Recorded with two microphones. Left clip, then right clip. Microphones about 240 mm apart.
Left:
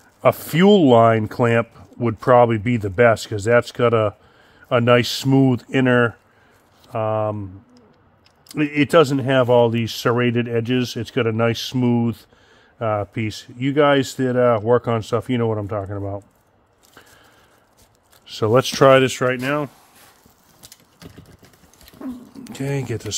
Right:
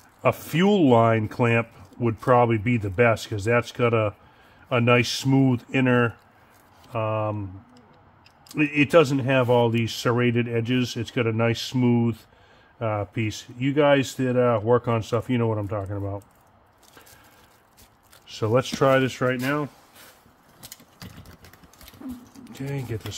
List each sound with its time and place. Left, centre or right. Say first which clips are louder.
0.2 s speech: left 6 dB; left
8.5 s speech: left 2 dB; left
18.2 s speech: left 6 dB; left
22.4 s speech: left 9 dB; left